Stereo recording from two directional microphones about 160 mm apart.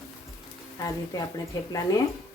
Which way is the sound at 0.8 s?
20° left (ahead or behind).